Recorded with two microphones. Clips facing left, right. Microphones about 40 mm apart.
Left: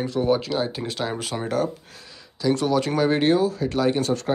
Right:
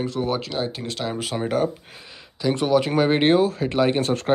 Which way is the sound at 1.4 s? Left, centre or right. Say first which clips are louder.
Right 2 dB; right.